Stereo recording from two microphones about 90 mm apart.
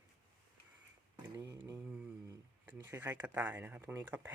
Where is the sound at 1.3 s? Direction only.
40° right (ahead or behind).